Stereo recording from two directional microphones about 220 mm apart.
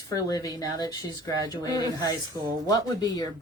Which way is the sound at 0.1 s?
15° left (ahead or behind).